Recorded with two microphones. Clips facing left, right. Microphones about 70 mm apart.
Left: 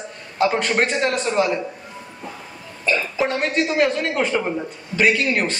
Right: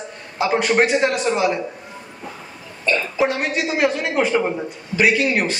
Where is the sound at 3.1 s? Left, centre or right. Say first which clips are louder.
Even; centre.